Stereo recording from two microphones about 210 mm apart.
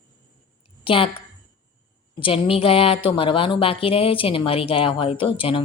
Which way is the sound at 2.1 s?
25° left (ahead or behind).